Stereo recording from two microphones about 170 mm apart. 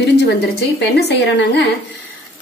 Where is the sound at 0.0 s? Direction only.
80° left.